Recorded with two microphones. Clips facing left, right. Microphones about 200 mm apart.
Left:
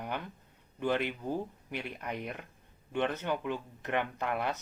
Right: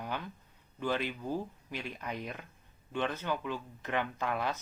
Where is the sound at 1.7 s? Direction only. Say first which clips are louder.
Left 2 dB; 60° left (ahead or behind).